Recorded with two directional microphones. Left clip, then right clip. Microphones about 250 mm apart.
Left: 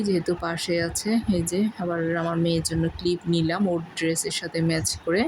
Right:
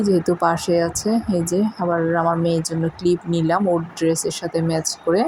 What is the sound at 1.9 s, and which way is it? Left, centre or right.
Speech, centre.